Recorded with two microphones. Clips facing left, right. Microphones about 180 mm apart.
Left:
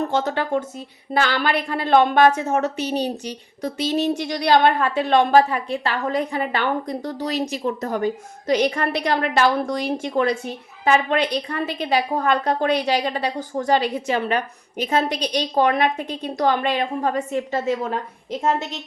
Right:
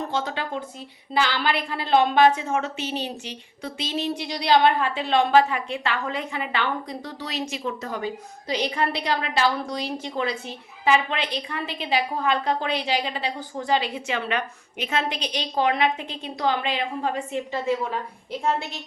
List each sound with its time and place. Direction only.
0.1 s a woman's voice: 45° left (ahead or behind)